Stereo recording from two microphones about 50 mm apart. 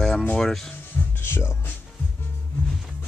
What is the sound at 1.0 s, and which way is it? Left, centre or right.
Music, left.